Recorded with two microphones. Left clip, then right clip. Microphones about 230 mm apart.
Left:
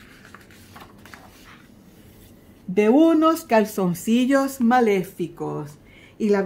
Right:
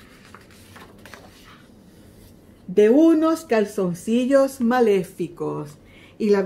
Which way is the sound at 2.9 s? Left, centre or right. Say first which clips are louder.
Even; left.